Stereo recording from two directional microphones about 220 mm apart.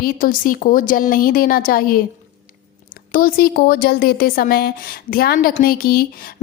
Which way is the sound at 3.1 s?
40° left (ahead or behind).